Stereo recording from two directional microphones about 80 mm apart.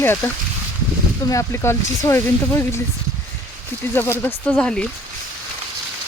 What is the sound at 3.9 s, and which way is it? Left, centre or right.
Speech, left.